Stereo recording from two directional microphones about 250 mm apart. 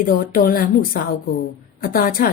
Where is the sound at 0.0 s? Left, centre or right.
Left.